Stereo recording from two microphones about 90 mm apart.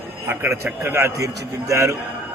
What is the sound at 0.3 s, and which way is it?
A man's voice, 25° right (ahead or behind).